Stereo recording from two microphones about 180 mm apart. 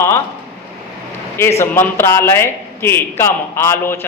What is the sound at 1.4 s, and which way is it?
A woman's voice, 15° left (ahead or behind).